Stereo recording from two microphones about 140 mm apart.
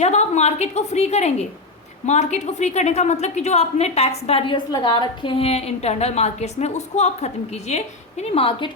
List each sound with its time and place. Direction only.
0.0 s a woman's voice: 55° left (ahead or behind)